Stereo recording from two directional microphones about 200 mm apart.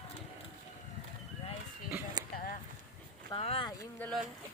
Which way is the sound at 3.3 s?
30° left (ahead or behind).